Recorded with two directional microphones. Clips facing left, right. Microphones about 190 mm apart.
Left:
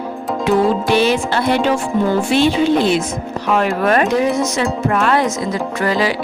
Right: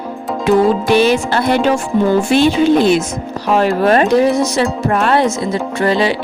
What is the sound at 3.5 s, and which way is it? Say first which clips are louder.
Speech: right 3 dB; 30° right (ahead or behind).